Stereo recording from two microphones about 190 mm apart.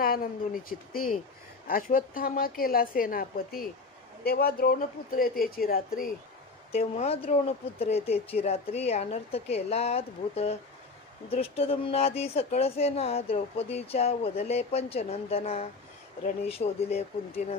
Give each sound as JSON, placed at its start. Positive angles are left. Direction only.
{"t": 0.0, "sound": "a woman's voice", "side_deg": 50}
{"t": 6.7, "sound": "speech", "side_deg": 30}